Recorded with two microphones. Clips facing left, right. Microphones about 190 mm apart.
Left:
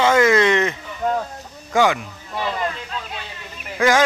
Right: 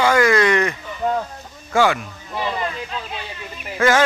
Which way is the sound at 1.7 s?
15° left (ahead or behind).